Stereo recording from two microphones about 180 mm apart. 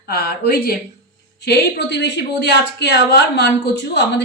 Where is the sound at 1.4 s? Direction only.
65° left (ahead or behind).